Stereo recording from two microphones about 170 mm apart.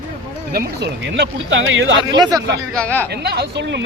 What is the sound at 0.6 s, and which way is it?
Speech, 85° right.